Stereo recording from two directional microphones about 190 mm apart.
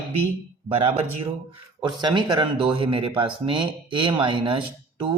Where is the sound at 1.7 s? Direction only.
25° right (ahead or behind).